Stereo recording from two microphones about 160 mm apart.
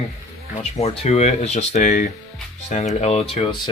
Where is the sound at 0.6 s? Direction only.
40° left (ahead or behind).